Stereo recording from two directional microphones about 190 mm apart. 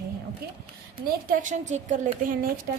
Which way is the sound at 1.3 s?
40° right (ahead or behind).